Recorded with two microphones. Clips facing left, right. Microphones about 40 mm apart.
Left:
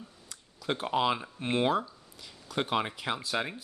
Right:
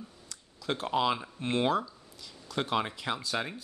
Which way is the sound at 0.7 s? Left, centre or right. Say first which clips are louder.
Even; centre.